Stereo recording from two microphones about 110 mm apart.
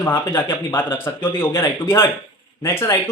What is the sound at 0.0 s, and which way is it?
A man's voice, 25° left (ahead or behind).